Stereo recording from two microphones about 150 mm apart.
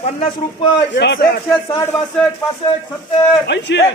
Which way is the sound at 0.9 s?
70° left (ahead or behind).